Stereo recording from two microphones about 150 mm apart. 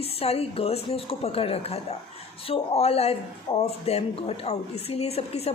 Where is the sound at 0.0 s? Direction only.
40° left (ahead or behind).